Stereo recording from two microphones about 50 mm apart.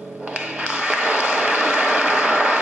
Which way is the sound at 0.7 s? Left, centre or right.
Right.